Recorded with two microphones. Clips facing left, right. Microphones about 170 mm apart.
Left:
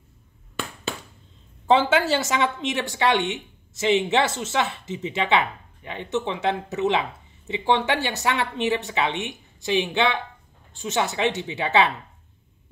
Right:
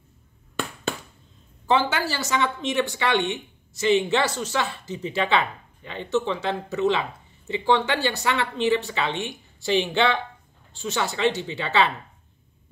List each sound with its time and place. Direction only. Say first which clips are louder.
1.7 s speech: left 4 dB; 25° left (ahead or behind)